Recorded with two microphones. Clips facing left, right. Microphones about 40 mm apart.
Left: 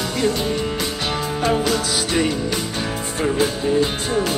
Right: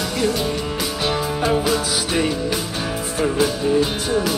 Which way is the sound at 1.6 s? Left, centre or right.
Centre.